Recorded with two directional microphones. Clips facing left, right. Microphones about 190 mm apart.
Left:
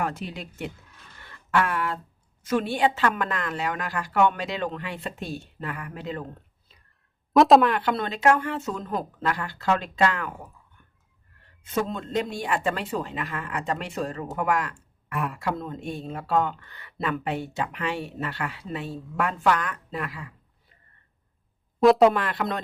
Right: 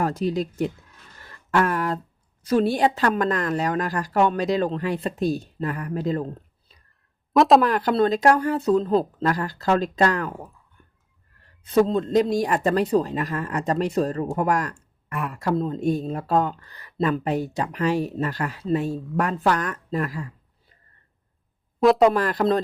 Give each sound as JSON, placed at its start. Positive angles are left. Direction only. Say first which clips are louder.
{"t": 0.0, "sound": "speech", "louder": "right 7 dB", "side_deg": -40}
{"t": 1.2, "sound": "a sound", "louder": "right 3 dB", "side_deg": -40}
{"t": 2.4, "sound": "speech", "louder": "right 4 dB", "side_deg": -35}
{"t": 7.3, "sound": "speech", "louder": "even", "side_deg": 0}
{"t": 7.7, "sound": "speech", "louder": "right 6 dB", "side_deg": -40}
{"t": 11.6, "sound": "speech", "louder": "right 9 dB", "side_deg": -35}
{"t": 15.1, "sound": "speech", "louder": "even", "side_deg": 0}
{"t": 15.4, "sound": "speech", "louder": "right 6 dB", "side_deg": -30}
{"t": 21.8, "sound": "speech", "louder": "even", "side_deg": 0}
{"t": 22.1, "sound": "speech", "louder": "right 7 dB", "side_deg": -40}